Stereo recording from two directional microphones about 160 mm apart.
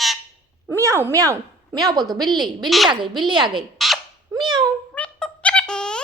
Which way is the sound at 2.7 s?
Centre (ahead or behind).